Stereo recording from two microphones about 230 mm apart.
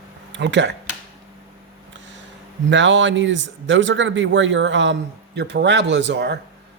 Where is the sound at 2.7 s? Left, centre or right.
Right.